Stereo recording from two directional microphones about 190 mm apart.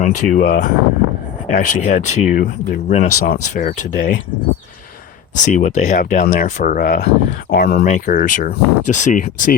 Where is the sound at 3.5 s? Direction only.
40° left (ahead or behind).